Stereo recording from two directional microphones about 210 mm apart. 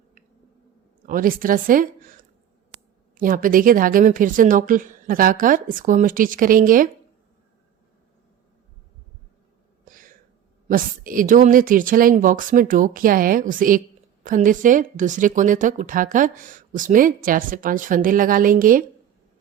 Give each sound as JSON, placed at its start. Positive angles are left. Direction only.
{"t": 1.0, "sound": "speech", "side_deg": -40}
{"t": 9.8, "sound": "a sound", "side_deg": -40}
{"t": 10.7, "sound": "speech", "side_deg": -40}